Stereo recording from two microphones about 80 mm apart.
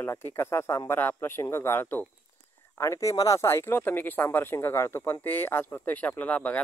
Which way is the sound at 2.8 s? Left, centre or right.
Left.